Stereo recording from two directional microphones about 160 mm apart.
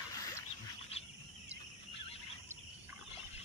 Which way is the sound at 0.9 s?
40° left (ahead or behind).